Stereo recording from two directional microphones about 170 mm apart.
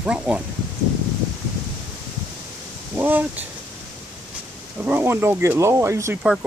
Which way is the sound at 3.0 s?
10° right (ahead or behind).